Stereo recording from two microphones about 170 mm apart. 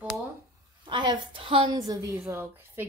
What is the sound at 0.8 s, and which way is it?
A woman's voice, 25° right (ahead or behind).